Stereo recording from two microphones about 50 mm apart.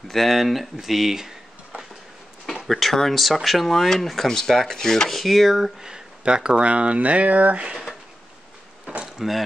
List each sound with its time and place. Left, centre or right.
0.1 s speech: centre
2.6 s speech: centre
5.2 s speech: centre; by 7.6 s right
8.8 s a sound: centre